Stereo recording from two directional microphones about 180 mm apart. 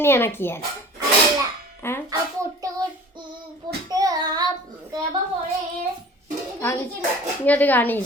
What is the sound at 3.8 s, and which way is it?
Speech, 20° right (ahead or behind).